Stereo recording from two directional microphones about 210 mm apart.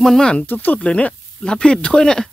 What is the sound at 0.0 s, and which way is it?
Speech, centre (ahead or behind).